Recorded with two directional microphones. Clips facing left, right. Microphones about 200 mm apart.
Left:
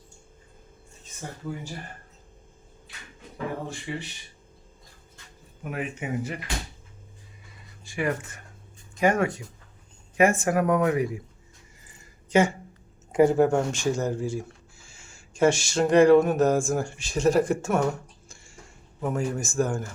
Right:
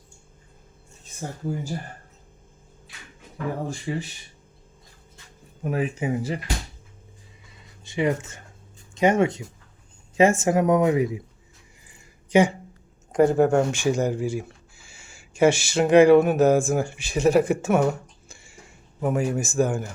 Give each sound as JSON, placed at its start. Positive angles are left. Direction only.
{"t": 3.9, "sound": "speech", "side_deg": -35}
{"t": 5.6, "sound": "speech", "side_deg": -35}
{"t": 7.9, "sound": "speech", "side_deg": -20}
{"t": 12.3, "sound": "speech", "side_deg": -15}
{"t": 13.1, "sound": "speech", "side_deg": 5}
{"t": 18.3, "sound": "a sound", "side_deg": -5}